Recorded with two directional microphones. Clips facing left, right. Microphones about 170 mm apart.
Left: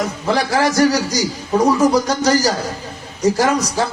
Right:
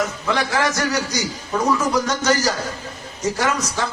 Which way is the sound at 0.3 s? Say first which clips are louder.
Left 5 dB; 35° left (ahead or behind).